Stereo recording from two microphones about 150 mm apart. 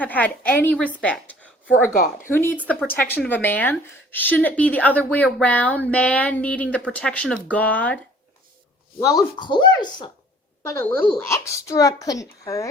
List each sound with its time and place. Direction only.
0.0 s speech: 10° left (ahead or behind)
0.9 s a sound: 10° left (ahead or behind)
1.9 s a woman's voice: 70° left (ahead or behind)
2.2 s speech: 15° left (ahead or behind)
9.0 s a child's voice: 20° left (ahead or behind)
10.7 s a child's voice: 15° left (ahead or behind)